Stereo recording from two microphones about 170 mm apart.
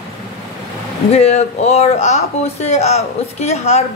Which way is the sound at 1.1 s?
40° left (ahead or behind).